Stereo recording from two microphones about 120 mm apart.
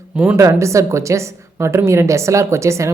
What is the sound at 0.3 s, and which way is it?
Speech, 25° right (ahead or behind).